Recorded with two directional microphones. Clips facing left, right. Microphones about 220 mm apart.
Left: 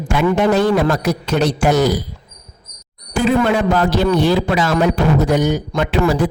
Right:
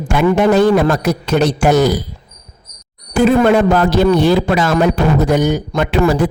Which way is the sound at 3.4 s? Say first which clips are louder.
Right 4 dB; 50° right (ahead or behind).